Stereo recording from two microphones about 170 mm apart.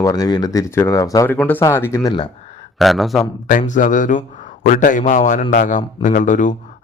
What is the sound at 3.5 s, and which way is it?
A man's voice, 45° left (ahead or behind).